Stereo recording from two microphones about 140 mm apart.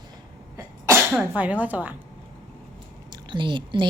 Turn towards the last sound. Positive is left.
turn(degrees=-35)  # may be behind; listen again after turning